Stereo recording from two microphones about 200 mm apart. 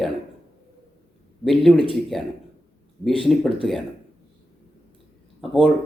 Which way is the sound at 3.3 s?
Centre (ahead or behind).